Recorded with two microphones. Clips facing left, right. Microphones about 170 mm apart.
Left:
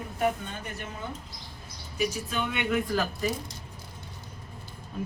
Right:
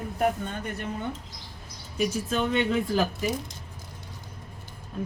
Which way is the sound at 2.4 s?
35° right (ahead or behind).